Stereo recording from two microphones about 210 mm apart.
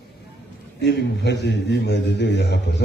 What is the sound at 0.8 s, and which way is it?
A man's voice, 55° left (ahead or behind).